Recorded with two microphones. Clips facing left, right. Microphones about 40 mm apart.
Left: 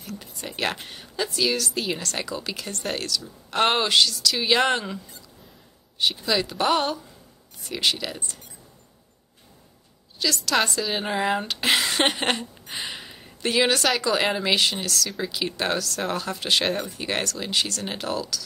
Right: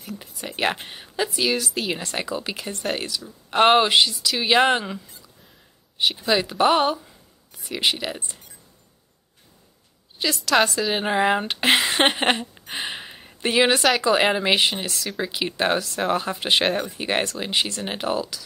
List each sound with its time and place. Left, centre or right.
0.0 s speech: centre
0.6 s speech: centre
1.7 s a woman's voice: centre
2.0 s speech: right
6.1 s speech: centre
10.1 s a woman's voice: right
10.4 s a woman's voice: centre
11.0 s speech: right
16.6 s speech: centre
16.9 s speech: right